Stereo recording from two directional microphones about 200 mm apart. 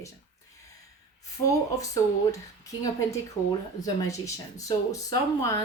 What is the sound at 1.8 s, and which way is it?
Speech, 15° left (ahead or behind).